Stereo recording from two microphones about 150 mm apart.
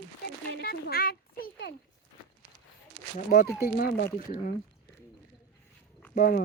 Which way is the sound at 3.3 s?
75° left (ahead or behind).